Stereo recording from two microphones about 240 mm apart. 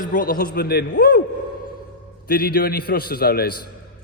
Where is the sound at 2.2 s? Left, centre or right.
Left.